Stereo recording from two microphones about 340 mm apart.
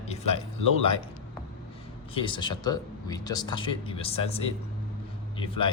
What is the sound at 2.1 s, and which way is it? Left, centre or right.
Speech, centre.